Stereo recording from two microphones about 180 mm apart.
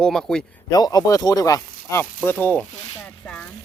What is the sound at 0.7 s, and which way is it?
Speech, 20° left (ahead or behind).